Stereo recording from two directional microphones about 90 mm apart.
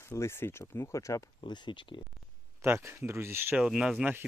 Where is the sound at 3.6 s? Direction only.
5° right (ahead or behind).